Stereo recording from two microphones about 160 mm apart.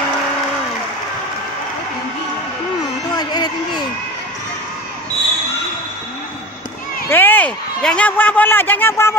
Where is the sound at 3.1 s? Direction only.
25° left (ahead or behind).